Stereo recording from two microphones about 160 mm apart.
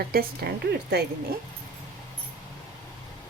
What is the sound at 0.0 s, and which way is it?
A woman's voice, 70° right (ahead or behind).